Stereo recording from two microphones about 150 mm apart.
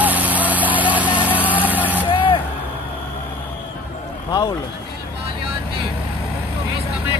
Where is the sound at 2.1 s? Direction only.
35° left (ahead or behind).